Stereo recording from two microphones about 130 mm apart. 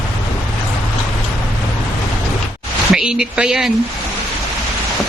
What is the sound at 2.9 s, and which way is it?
Speech, 5° right (ahead or behind).